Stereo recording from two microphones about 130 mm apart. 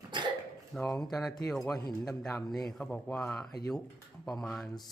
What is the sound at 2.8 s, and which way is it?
Speech, 15° left (ahead or behind).